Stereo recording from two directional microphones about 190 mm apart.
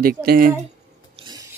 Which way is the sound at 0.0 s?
50° right (ahead or behind).